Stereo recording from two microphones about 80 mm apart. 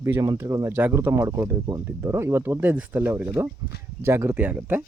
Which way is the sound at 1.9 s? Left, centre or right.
Right.